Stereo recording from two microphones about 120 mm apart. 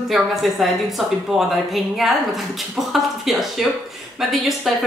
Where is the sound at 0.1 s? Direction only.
Centre (ahead or behind).